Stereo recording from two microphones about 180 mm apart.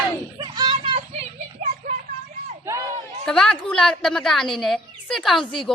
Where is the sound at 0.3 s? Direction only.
25° right (ahead or behind).